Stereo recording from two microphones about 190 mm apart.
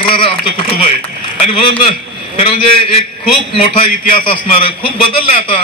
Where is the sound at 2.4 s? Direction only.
30° left (ahead or behind).